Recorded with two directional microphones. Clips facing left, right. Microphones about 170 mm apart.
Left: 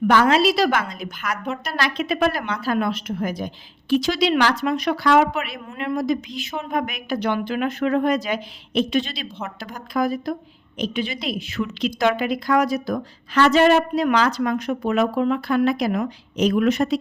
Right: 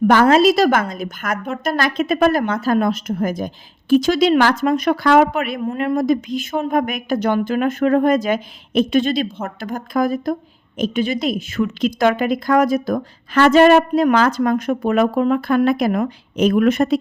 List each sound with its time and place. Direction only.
0.1 s a woman's voice: 45° right (ahead or behind)